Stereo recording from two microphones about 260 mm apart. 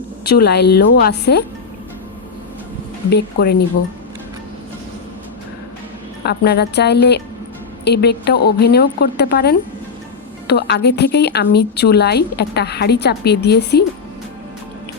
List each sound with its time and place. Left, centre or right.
0.3 s a woman's voice: left
3.1 s a woman's voice: left
6.2 s a woman's voice: left